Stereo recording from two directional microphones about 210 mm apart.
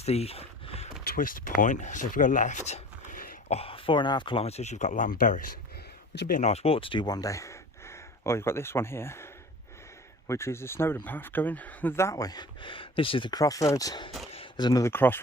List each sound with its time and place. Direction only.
0.0 s a sound: 30° left (ahead or behind)
1.0 s speech: 45° left (ahead or behind)
3.6 s speech: 25° left (ahead or behind); by 15.2 s 10° left (ahead or behind)